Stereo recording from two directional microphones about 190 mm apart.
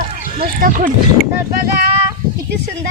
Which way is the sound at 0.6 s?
50° right (ahead or behind).